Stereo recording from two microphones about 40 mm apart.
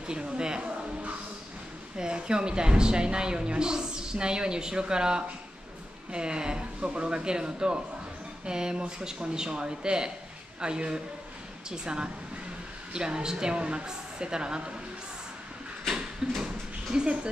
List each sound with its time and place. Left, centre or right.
0.0 s a woman's voice: right
2.0 s a woman's voice: right
16.2 s a sound: right
16.9 s a woman's voice: right